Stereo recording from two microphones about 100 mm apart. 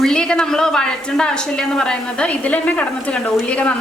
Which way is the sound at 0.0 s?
10° left (ahead or behind).